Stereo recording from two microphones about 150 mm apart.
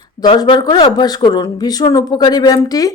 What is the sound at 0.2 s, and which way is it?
Speech, 30° left (ahead or behind).